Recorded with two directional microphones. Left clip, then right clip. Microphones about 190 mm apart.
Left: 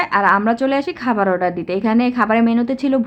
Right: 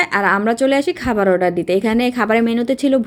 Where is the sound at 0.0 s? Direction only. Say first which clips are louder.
Left 1 dB; 10° right (ahead or behind).